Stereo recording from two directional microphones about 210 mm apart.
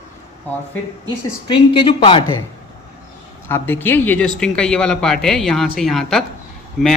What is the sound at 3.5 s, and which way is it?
Speech, 10° left (ahead or behind).